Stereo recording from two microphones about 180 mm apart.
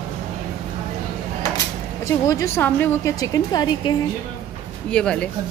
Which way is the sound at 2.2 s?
15° left (ahead or behind).